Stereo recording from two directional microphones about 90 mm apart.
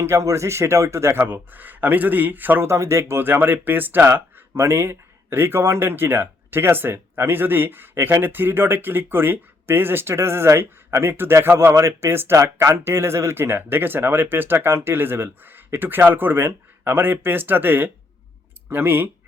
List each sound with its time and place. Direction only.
0.0 s a man's voice: 35° right (ahead or behind)